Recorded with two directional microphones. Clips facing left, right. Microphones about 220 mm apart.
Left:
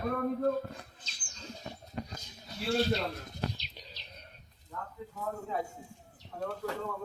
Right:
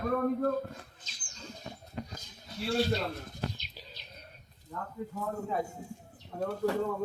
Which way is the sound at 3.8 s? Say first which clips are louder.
Right 1 dB; 5° right (ahead or behind).